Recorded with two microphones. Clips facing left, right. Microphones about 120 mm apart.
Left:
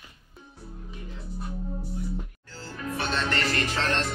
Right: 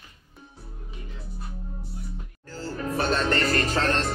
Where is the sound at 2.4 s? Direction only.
45° right (ahead or behind).